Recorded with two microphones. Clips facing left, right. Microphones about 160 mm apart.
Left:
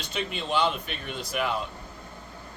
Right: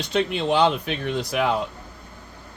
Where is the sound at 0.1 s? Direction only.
90° right.